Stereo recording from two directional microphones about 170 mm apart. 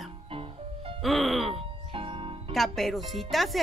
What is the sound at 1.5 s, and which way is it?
Music, 30° right (ahead or behind).